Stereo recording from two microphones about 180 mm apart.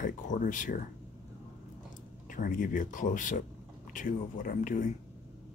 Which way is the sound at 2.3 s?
50° left (ahead or behind).